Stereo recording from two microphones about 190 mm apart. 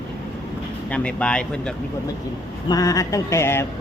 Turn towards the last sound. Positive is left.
turn(degrees=15)  # may be behind; listen again after turning